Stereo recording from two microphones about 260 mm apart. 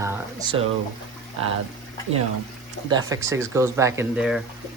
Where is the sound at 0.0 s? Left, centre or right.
Centre.